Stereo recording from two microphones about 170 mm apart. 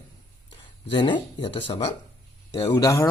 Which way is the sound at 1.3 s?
30° left (ahead or behind).